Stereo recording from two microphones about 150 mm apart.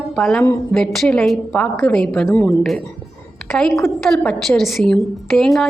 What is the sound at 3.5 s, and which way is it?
A woman's voice, centre (ahead or behind).